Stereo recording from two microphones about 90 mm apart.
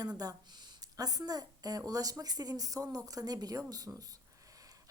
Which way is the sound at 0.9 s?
45° right (ahead or behind).